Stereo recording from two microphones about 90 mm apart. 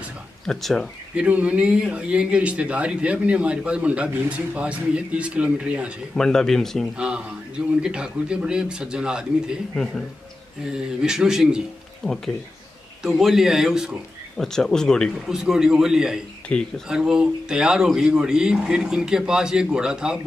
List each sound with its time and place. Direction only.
0.5 s a man's voice: 5° left (ahead or behind)
1.1 s speech: 15° right (ahead or behind)
6.1 s a man's voice: 5° left (ahead or behind)
7.0 s speech: 10° right (ahead or behind)
10.6 s a man's voice: 10° right (ahead or behind)
15.1 s a man's voice: 5° right (ahead or behind)
16.4 s speech: 10° left (ahead or behind)
16.8 s speech: 5° right (ahead or behind)